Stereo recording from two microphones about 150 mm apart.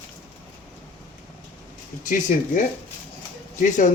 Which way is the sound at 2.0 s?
60° left (ahead or behind).